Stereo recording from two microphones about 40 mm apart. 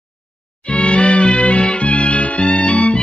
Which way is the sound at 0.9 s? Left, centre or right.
Left.